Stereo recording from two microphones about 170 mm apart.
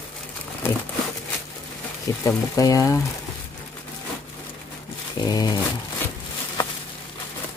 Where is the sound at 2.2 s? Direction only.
20° left (ahead or behind).